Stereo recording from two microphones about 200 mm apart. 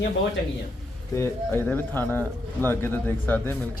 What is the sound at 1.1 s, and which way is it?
Speech, 10° left (ahead or behind).